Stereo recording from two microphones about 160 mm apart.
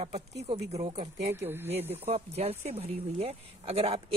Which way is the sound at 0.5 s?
40° right (ahead or behind).